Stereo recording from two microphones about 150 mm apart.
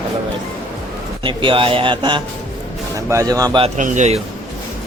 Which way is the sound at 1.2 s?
35° right (ahead or behind).